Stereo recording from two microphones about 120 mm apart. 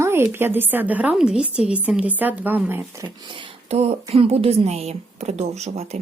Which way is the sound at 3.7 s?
60° right (ahead or behind).